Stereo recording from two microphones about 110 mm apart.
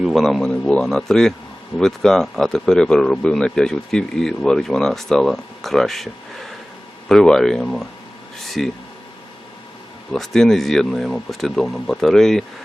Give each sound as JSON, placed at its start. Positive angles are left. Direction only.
{"t": 0.0, "sound": "speech", "side_deg": 0}
{"t": 8.4, "sound": "a sound", "side_deg": 0}
{"t": 10.1, "sound": "speech", "side_deg": 5}